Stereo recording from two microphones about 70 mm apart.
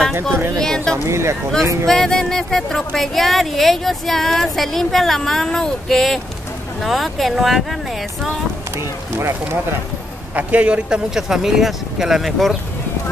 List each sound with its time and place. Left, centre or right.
0.6 s speech: centre
1.0 s speech: right
1.9 s speech: centre
8.7 s speech: right
10.3 s speech: centre